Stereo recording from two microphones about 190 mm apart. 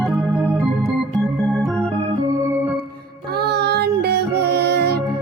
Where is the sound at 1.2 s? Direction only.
Centre (ahead or behind).